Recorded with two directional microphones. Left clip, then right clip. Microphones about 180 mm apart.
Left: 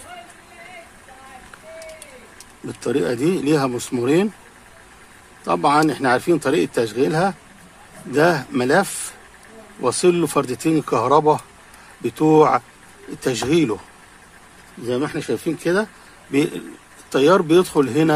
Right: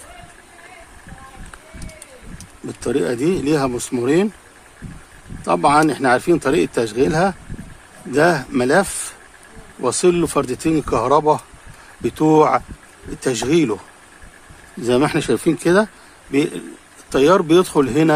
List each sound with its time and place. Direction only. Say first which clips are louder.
2.6 s speech: right 1 dB; 5° right (ahead or behind)
5.4 s speech: right 2 dB; 10° right (ahead or behind)
14.8 s speech: right 6 dB; 25° right (ahead or behind)
16.3 s speech: right 1 dB; 5° right (ahead or behind)